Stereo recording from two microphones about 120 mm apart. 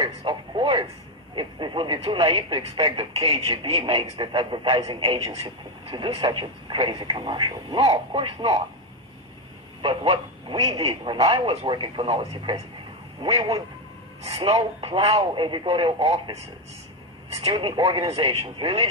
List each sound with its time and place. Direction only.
0.0 s a sound: 45° right (ahead or behind)
1.3 s speech: 40° right (ahead or behind)
9.8 s speech: 45° right (ahead or behind)
13.3 s speech: 35° right (ahead or behind)
14.4 s speech: 50° right (ahead or behind)
17.5 s speech: 40° right (ahead or behind)
18.0 s speech: 55° right (ahead or behind)